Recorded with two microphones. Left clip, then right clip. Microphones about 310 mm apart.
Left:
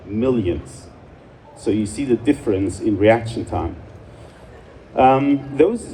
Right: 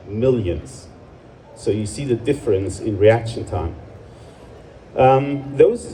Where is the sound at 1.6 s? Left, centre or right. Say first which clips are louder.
Left 2 dB; left.